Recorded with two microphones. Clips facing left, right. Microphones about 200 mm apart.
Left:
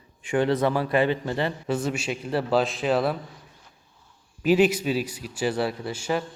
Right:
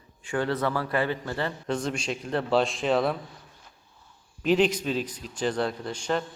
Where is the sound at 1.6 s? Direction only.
5° left (ahead or behind).